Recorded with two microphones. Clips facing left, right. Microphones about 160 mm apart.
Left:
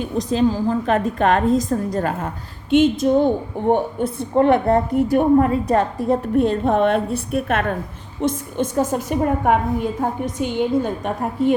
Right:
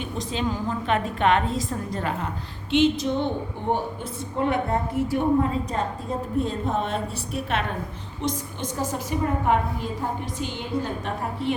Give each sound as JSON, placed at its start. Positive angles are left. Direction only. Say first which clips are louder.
{"t": 0.0, "sound": "a woman's voice", "louder": "left 9 dB", "side_deg": 40}
{"t": 3.7, "sound": "a woman's voice", "louder": "left 9 dB", "side_deg": 60}
{"t": 5.1, "sound": "a woman's voice", "louder": "left 7 dB", "side_deg": 65}